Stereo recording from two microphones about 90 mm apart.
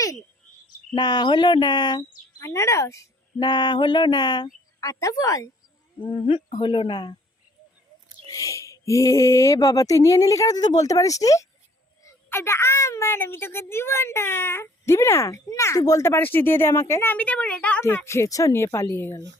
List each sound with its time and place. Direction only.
0.9 s speech: 50° left (ahead or behind)
2.4 s speech: 35° left (ahead or behind)
3.3 s speech: 50° left (ahead or behind)
6.0 s speech: 70° left (ahead or behind)
8.3 s speech: 40° left (ahead or behind)
12.0 s a child's voice: 30° left (ahead or behind)
17.2 s a woman's voice: 15° left (ahead or behind)
17.8 s speech: 30° left (ahead or behind)